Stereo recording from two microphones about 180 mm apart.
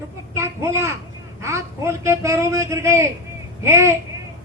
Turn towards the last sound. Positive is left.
turn(degrees=-15)  # may be behind; listen again after turning